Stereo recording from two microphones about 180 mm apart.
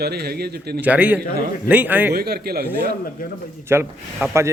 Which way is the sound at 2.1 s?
60° right (ahead or behind).